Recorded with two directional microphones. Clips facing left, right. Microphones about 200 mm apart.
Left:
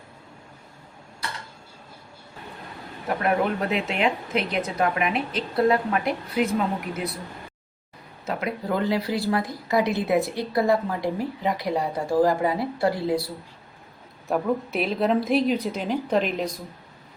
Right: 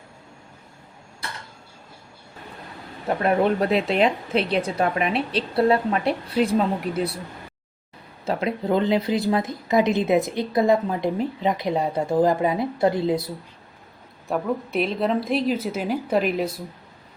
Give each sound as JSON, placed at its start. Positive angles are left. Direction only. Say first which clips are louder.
{"t": 3.2, "sound": "speech", "louder": "right 4 dB", "side_deg": -35}
{"t": 8.2, "sound": "speech", "louder": "right 4 dB", "side_deg": -30}
{"t": 14.3, "sound": "a woman's voice", "louder": "left 1 dB", "side_deg": 0}